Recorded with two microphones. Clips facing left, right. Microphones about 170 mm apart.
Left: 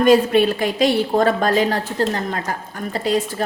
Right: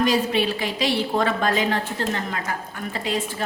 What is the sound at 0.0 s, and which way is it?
A woman's voice, 50° left (ahead or behind).